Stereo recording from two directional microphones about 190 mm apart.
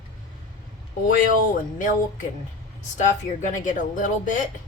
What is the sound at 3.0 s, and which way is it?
Speech, 40° left (ahead or behind).